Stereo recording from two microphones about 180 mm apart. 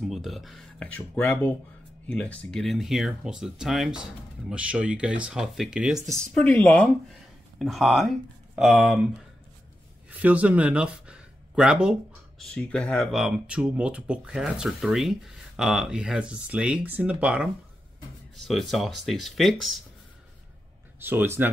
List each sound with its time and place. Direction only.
0.0 s speech: centre (ahead or behind)
6.3 s speech: 10° left (ahead or behind)
7.5 s speech: centre (ahead or behind)
12.4 s speech: 5° left (ahead or behind)
21.0 s speech: 10° right (ahead or behind)